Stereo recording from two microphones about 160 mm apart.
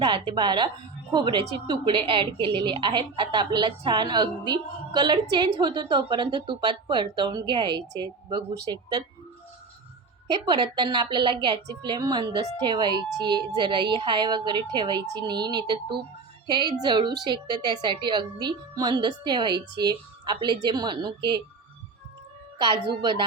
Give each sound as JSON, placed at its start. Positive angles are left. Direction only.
{"t": 0.0, "sound": "a woman's voice", "side_deg": -30}
{"t": 10.3, "sound": "a woman's voice", "side_deg": -30}
{"t": 22.9, "sound": "a woman's voice", "side_deg": -30}